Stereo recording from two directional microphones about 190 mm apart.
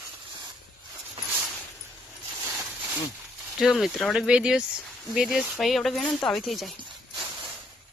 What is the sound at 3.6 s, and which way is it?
Speech, centre (ahead or behind).